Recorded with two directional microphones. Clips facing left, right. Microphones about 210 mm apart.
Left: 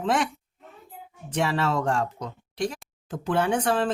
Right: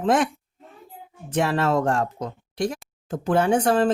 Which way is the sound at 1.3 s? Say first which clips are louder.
Right 4 dB; 50° right (ahead or behind).